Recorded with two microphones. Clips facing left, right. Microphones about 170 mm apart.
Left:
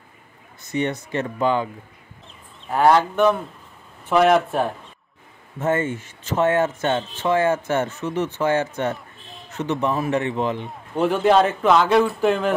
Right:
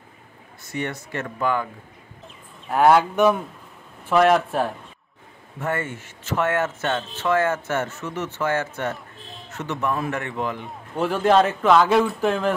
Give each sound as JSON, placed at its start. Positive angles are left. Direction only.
{"t": 0.7, "sound": "speech", "side_deg": 20}
{"t": 2.7, "sound": "speech", "side_deg": -5}
{"t": 5.6, "sound": "speech", "side_deg": 20}
{"t": 10.7, "sound": "speech", "side_deg": 0}